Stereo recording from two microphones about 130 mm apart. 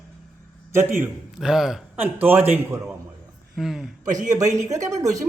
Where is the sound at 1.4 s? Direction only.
5° right (ahead or behind).